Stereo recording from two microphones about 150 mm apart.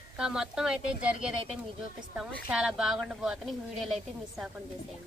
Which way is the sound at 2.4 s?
5° right (ahead or behind).